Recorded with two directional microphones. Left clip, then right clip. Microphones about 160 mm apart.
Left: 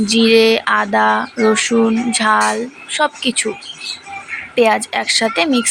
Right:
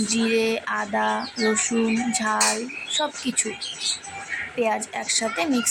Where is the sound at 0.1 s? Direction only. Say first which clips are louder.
Left 12 dB; 20° left (ahead or behind).